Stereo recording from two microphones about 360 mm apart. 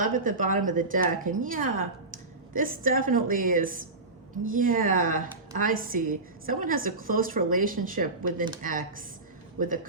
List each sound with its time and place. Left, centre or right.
0.0 s speech: right